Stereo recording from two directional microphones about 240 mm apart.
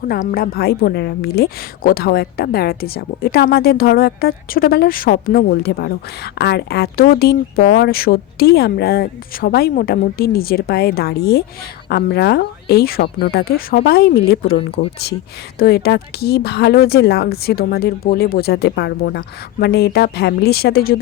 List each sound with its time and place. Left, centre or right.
0.1 s a woman's voice: left